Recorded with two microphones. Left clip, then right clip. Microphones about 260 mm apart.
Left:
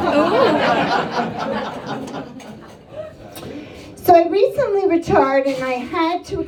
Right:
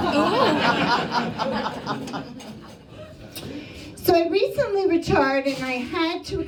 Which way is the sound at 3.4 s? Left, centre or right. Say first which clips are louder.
Left 2 dB; centre.